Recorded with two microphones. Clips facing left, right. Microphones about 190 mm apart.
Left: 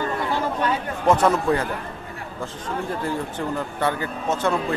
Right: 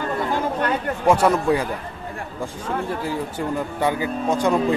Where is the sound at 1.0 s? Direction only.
10° right (ahead or behind).